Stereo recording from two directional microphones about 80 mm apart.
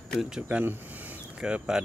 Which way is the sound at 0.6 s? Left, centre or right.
Right.